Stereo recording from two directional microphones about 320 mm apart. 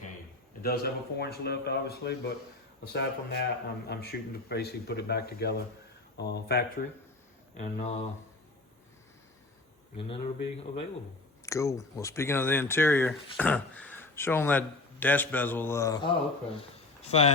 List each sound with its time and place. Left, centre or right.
0.6 s a man's voice: left
10.0 s speech: centre